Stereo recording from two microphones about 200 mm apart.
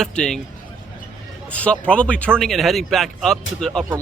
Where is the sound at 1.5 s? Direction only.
5° left (ahead or behind).